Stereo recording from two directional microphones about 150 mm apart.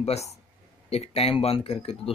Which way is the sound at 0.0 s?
45° left (ahead or behind).